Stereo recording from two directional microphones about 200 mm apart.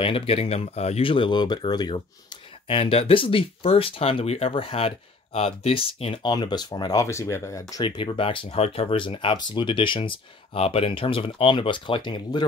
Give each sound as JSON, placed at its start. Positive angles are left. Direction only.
{"t": 0.0, "sound": "speech", "side_deg": 30}